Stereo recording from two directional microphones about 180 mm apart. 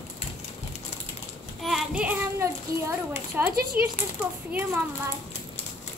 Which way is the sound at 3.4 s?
10° right (ahead or behind).